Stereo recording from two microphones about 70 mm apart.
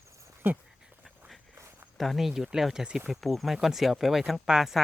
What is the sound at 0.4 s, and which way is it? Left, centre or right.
Speech, right.